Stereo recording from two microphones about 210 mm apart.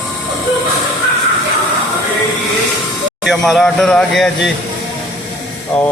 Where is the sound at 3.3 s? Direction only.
Centre (ahead or behind).